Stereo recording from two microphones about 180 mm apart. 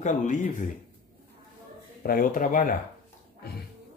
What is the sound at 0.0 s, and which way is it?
Speech, 45° left (ahead or behind).